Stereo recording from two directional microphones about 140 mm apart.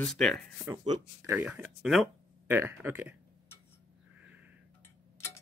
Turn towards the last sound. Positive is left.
turn(degrees=-10)  # may be behind; listen again after turning